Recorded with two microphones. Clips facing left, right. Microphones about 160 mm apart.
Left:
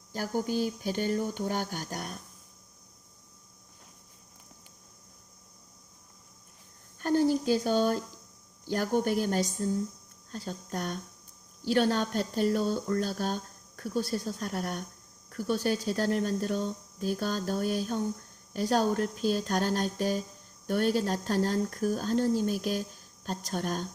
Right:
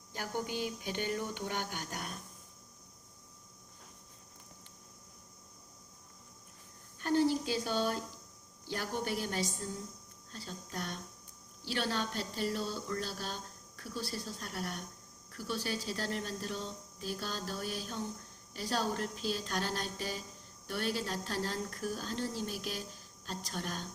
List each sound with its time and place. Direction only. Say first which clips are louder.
0.1 s speech: left 7 dB; 40° left (ahead or behind)
7.0 s a sound: left 4 dB; 45° left (ahead or behind)
8.6 s speech: left 9 dB; 45° left (ahead or behind)